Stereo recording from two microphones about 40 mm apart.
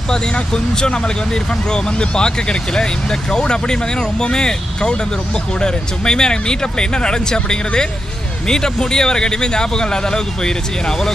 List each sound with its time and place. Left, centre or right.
0.1 s speech: centre